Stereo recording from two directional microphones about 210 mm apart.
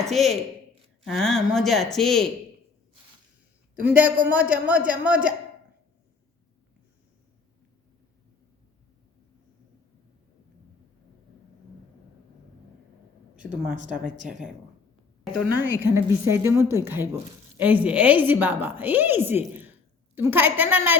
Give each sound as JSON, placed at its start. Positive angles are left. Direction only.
{"t": 0.0, "sound": "speech", "side_deg": 0}
{"t": 3.8, "sound": "a woman's voice", "side_deg": -10}
{"t": 13.4, "sound": "a woman's voice", "side_deg": -5}